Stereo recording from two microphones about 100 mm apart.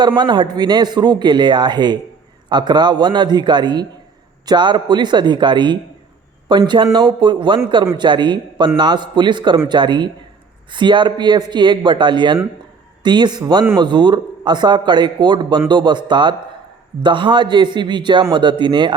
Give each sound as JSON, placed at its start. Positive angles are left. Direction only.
{"t": 0.2, "sound": "a man's voice", "side_deg": -50}